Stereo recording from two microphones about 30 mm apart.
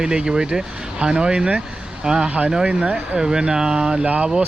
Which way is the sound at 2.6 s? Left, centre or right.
Right.